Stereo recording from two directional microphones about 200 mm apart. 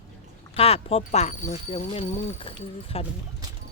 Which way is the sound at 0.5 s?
30° left (ahead or behind).